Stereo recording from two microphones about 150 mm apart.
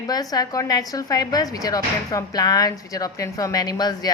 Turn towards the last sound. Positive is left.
turn(degrees=25)  # may be behind; listen again after turning